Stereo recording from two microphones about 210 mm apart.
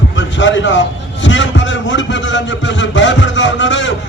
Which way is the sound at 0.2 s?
60° left (ahead or behind).